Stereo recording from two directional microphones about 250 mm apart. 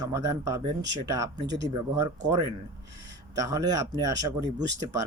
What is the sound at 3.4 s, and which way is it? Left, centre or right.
Speech, centre.